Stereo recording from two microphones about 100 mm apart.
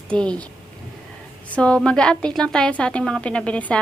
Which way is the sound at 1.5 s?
10° left (ahead or behind).